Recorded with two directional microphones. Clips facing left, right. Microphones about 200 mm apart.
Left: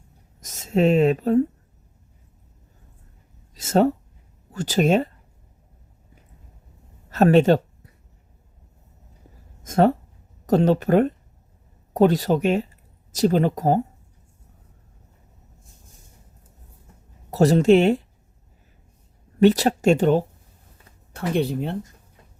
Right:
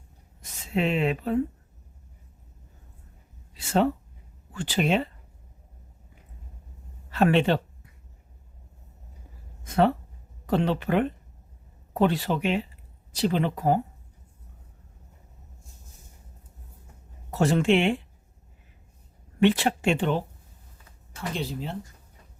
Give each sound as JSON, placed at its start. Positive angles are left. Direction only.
{"t": 0.4, "sound": "speech", "side_deg": 40}
{"t": 3.5, "sound": "a sound", "side_deg": 40}
{"t": 4.5, "sound": "speech", "side_deg": 40}
{"t": 7.1, "sound": "speech", "side_deg": 45}
{"t": 9.6, "sound": "speech", "side_deg": 45}
{"t": 17.3, "sound": "speech", "side_deg": 40}
{"t": 19.4, "sound": "speech", "side_deg": 40}
{"t": 21.1, "sound": "speech", "side_deg": 60}